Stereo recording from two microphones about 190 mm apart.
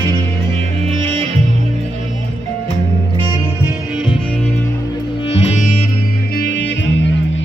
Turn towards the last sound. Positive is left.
turn(degrees=60)  # may be behind; listen again after turning